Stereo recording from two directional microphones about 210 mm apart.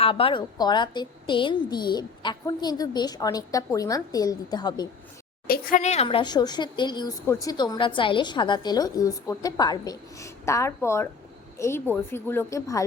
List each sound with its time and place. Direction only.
0.0 s speech: 25° left (ahead or behind)
5.5 s a woman's voice: 40° left (ahead or behind); by 12.8 s 15° left (ahead or behind)